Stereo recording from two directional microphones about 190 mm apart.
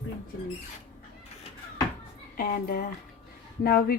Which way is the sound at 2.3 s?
50° left (ahead or behind).